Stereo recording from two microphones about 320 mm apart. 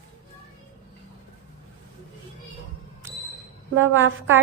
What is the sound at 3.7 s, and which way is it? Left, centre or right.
Speech, right.